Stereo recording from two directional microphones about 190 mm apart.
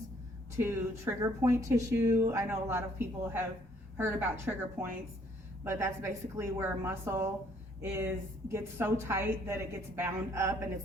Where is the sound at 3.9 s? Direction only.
10° right (ahead or behind).